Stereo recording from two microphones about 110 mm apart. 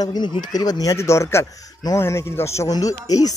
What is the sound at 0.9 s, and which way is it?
A man's voice, 25° left (ahead or behind).